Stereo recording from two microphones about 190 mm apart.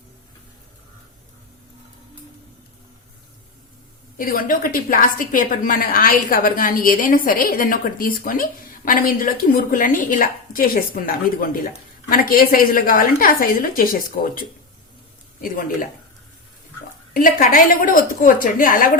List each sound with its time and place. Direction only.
4.2 s a woman's voice: 50° left (ahead or behind)
17.2 s a woman's voice: 45° left (ahead or behind)